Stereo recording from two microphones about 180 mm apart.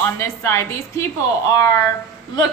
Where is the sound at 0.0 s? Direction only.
15° left (ahead or behind).